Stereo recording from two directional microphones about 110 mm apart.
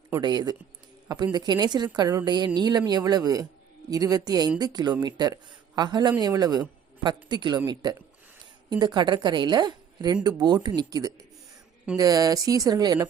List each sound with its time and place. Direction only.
0.2 s a man's voice: 40° right (ahead or behind)